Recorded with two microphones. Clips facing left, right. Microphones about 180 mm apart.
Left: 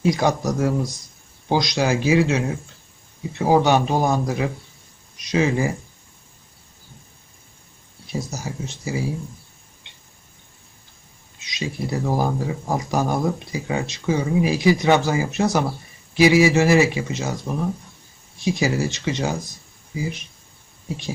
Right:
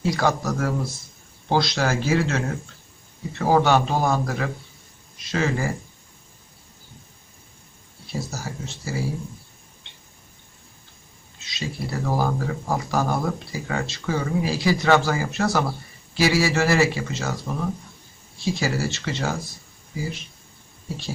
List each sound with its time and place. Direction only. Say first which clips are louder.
0.0 s speech: left 3 dB; 20° left (ahead or behind)
8.0 s speech: left 2 dB; 20° left (ahead or behind)
11.3 s speech: left 3 dB; 15° left (ahead or behind)
18.3 s speech: left 3 dB; 15° left (ahead or behind)